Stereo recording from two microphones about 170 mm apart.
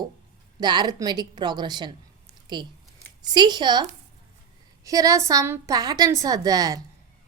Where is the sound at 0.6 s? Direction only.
25° right (ahead or behind).